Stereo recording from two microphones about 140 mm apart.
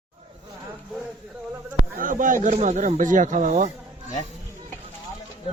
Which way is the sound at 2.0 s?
70° right (ahead or behind).